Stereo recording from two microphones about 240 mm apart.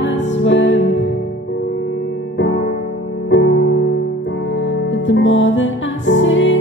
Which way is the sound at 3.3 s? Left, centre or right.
Left.